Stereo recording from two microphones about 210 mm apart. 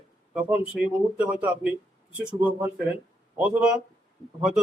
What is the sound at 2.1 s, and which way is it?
Speech, 5° right (ahead or behind).